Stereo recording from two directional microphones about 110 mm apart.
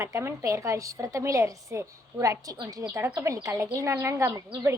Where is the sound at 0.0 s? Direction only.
25° right (ahead or behind).